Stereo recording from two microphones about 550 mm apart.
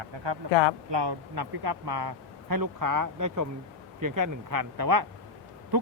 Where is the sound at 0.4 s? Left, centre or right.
Right.